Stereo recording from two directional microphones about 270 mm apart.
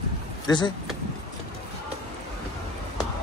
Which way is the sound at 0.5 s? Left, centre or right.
Centre.